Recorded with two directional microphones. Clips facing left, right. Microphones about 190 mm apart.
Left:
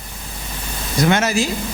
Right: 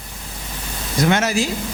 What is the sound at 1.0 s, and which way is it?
Speech, 15° left (ahead or behind).